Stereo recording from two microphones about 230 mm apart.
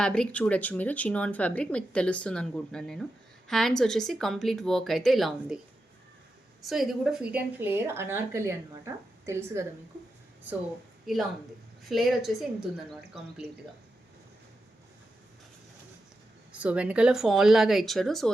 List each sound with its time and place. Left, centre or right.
0.0 s speech: centre
6.6 s speech: centre
11.0 s speech: centre
16.5 s speech: centre